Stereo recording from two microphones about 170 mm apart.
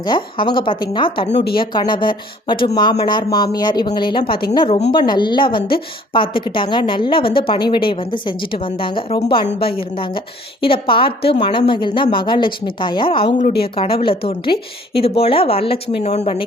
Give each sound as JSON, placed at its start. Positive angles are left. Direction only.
{"t": 0.0, "sound": "a woman's voice", "side_deg": 25}